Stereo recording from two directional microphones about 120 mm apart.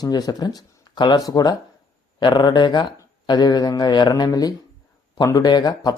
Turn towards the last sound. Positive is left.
turn(degrees=35)  # may be behind; listen again after turning